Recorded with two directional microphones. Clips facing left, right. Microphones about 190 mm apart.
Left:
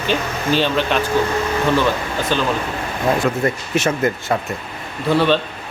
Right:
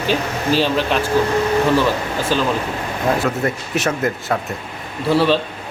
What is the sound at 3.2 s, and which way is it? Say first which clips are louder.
A man's voice: left 1 dB; centre (ahead or behind).